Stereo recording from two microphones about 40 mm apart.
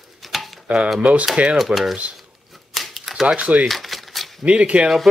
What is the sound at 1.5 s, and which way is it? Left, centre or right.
Speech, centre.